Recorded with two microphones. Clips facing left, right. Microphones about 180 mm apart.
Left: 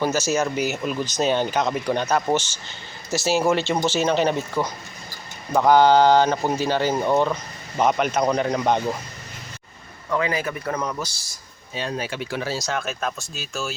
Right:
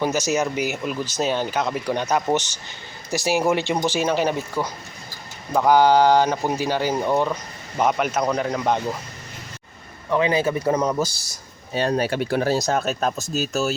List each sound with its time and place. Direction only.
0.0 s speech: 15° right (ahead or behind)
10.1 s speech: 20° right (ahead or behind)
11.7 s speech: 55° right (ahead or behind)
12.3 s speech: 45° right (ahead or behind)